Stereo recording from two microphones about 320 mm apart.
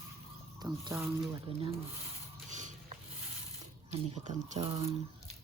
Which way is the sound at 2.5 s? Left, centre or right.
Right.